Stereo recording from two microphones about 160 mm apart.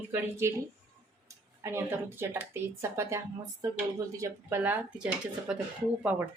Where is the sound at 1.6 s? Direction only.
15° right (ahead or behind).